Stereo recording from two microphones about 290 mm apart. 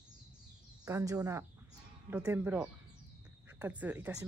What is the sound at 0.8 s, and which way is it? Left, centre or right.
Speech, centre.